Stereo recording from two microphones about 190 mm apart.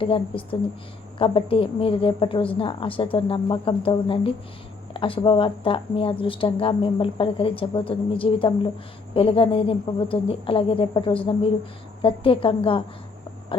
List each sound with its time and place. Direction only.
0.0 s speech: 30° left (ahead or behind)